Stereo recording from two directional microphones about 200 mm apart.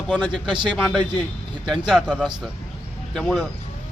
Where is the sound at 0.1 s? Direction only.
5° left (ahead or behind).